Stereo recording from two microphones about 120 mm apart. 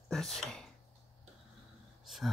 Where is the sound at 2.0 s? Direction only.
Centre (ahead or behind).